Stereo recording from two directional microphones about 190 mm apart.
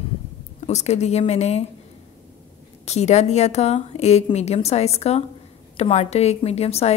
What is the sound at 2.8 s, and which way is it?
A woman's voice, 35° left (ahead or behind).